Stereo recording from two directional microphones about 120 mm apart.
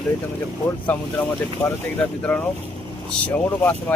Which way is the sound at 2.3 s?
5° left (ahead or behind).